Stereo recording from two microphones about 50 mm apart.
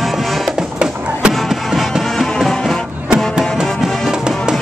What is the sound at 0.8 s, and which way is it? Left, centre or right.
Music, centre.